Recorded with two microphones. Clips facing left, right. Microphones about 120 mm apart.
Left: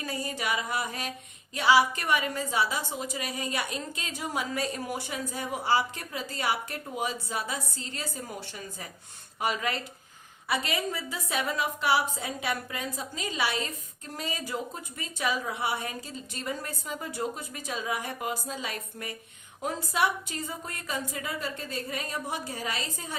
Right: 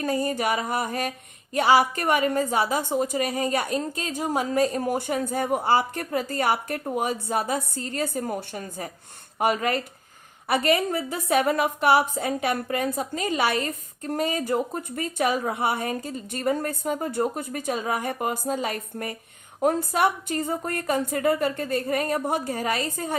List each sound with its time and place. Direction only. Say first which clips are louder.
0.0 s a woman's voice: right 9 dB; 50° right (ahead or behind)